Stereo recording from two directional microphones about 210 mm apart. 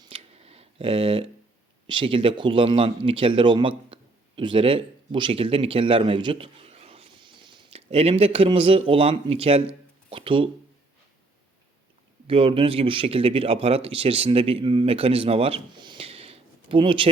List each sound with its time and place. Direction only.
0.0 s a sound: 25° right (ahead or behind)
1.9 s speech: 25° right (ahead or behind)
12.3 s speech: 25° right (ahead or behind)